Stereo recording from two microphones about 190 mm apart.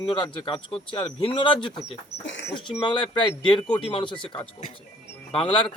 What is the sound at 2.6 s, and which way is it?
Speech, 25° left (ahead or behind).